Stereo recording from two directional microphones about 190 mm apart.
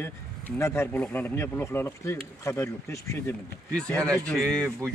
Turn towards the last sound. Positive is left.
turn(degrees=5)  # may be behind; listen again after turning